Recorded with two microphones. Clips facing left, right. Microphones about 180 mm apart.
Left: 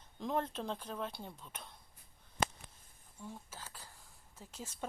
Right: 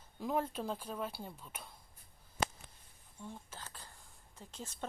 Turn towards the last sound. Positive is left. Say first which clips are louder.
# even
turn(degrees=10)  # may be behind; listen again after turning